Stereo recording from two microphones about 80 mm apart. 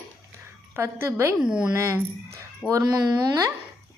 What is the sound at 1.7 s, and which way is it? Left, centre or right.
Speech, right.